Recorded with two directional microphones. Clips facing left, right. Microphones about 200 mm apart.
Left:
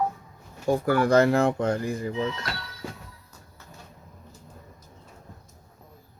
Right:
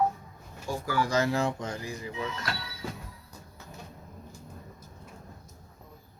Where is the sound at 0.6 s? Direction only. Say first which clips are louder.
Left 8 dB; 60° left (ahead or behind).